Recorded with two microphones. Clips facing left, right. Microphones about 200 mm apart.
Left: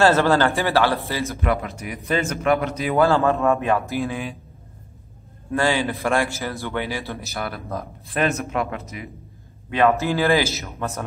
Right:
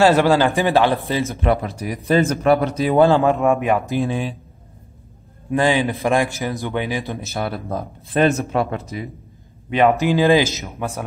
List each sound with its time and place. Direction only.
0.0 s a man's voice: 15° right (ahead or behind); by 3.0 s 35° right (ahead or behind)
3.0 s a man's voice: 15° right (ahead or behind)
4.0 s a man's voice: 30° right (ahead or behind)
5.5 s a man's voice: 15° right (ahead or behind)
9.7 s a man's voice: 20° right (ahead or behind)